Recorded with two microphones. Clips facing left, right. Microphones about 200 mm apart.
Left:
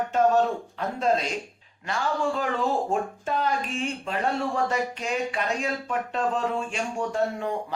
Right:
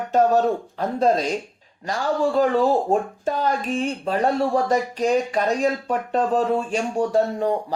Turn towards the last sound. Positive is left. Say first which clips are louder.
# right 6 dB
turn(degrees=-35)  # may be behind; listen again after turning